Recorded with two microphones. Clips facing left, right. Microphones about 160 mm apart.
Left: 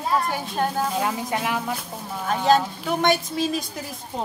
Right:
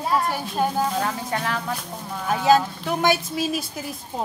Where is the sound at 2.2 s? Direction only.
5° right (ahead or behind).